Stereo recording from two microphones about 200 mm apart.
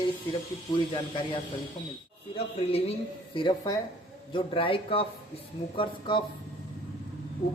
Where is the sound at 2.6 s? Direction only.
30° left (ahead or behind).